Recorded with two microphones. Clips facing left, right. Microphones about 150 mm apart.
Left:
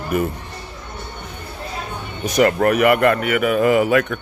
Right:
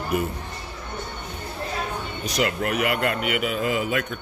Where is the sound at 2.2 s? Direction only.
55° left (ahead or behind).